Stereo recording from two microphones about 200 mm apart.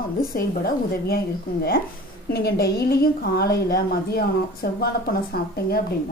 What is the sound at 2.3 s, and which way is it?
A woman's voice, 55° left (ahead or behind).